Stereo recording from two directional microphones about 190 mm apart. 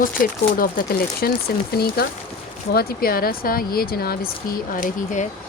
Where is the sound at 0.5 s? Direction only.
50° left (ahead or behind).